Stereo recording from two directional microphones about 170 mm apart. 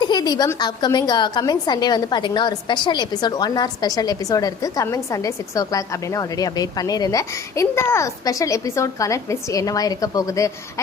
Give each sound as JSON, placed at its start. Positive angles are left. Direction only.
{"t": 0.0, "sound": "a woman's voice", "side_deg": 25}